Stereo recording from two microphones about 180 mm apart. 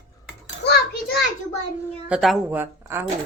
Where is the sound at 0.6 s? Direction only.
65° left (ahead or behind).